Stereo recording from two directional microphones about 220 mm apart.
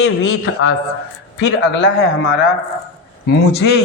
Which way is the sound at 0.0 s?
60° left (ahead or behind).